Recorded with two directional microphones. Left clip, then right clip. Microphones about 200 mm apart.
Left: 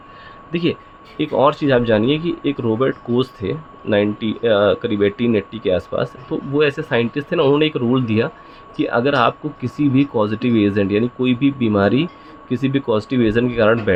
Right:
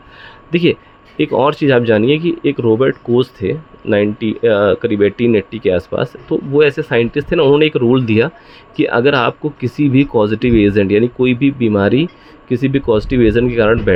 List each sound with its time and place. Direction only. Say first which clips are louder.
0.5 s speech: right 7 dB; 35° right (ahead or behind)